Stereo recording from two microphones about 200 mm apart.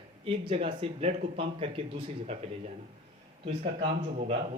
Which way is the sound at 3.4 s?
25° right (ahead or behind).